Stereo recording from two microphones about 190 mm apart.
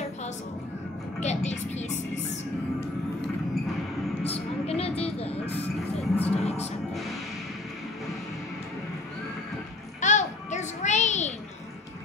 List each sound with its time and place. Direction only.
1.2 s music: 35° left (ahead or behind)
4.3 s vehicle: 30° left (ahead or behind)
5.5 s music: 10° left (ahead or behind)
6.2 s music: 35° left (ahead or behind)
6.9 s music: centre (ahead or behind)
9.9 s a sound: 40° left (ahead or behind)